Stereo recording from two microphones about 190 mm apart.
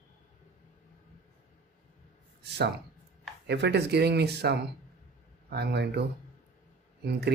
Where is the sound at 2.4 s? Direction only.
60° right (ahead or behind).